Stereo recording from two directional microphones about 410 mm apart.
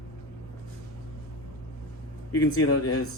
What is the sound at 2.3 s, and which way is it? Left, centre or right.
Speech, left.